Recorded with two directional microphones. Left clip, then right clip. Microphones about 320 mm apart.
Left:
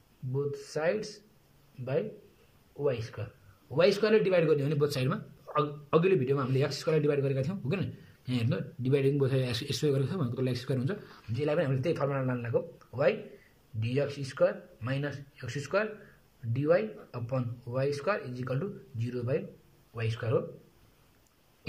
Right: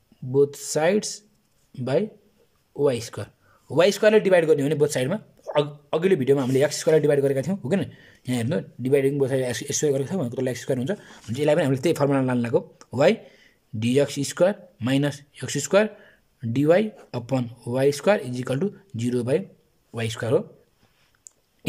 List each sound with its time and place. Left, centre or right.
0.3 s speech: right
2.8 s speech: right